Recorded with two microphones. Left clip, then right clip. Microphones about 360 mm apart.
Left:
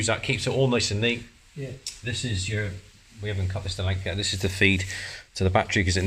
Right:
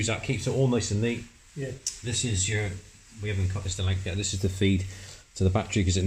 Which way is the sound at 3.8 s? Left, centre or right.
Left.